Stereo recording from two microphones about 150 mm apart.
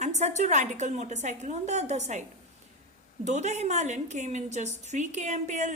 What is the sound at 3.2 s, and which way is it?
A woman's voice, 50° right (ahead or behind).